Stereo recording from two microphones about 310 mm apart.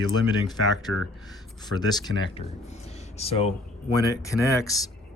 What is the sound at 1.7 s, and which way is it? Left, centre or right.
Speech, centre.